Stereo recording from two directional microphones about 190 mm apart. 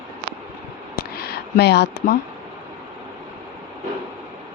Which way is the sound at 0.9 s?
55° left (ahead or behind).